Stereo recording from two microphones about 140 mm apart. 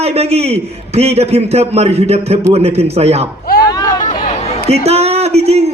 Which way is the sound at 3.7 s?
25° left (ahead or behind).